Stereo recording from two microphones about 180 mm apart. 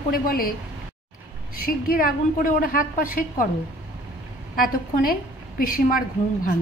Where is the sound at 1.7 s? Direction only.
50° left (ahead or behind).